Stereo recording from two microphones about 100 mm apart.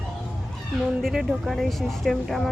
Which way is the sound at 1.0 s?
Centre (ahead or behind).